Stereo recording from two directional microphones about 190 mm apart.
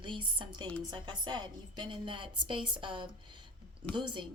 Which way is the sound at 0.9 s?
25° right (ahead or behind).